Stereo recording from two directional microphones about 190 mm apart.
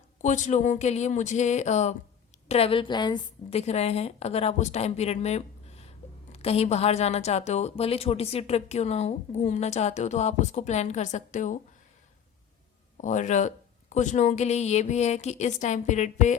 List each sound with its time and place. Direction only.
0.2 s a woman's voice: 40° left (ahead or behind)
13.0 s a woman's voice: 40° left (ahead or behind)